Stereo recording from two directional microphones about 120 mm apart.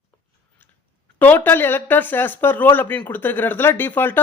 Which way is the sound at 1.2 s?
15° left (ahead or behind).